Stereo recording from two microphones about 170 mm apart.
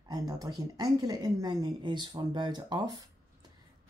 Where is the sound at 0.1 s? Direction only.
25° right (ahead or behind).